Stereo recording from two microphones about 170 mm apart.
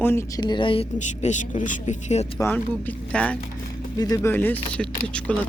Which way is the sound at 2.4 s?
10° left (ahead or behind).